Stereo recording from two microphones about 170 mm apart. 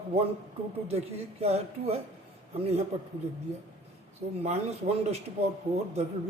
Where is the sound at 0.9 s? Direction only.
35° right (ahead or behind).